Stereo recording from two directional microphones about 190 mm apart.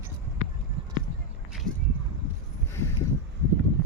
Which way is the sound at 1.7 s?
5° left (ahead or behind).